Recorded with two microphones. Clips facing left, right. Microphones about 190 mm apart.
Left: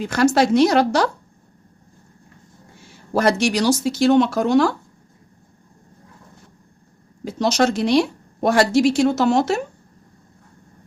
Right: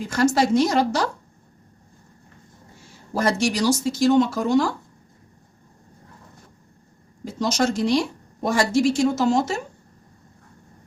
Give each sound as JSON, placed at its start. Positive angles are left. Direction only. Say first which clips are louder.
{"t": 0.0, "sound": "speech", "louder": "left 3 dB", "side_deg": 70}
{"t": 3.1, "sound": "speech", "louder": "left 4 dB", "side_deg": 65}
{"t": 7.3, "sound": "speech", "louder": "left 4 dB", "side_deg": 70}